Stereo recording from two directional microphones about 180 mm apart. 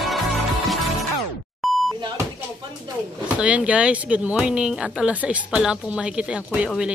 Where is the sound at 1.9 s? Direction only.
25° right (ahead or behind).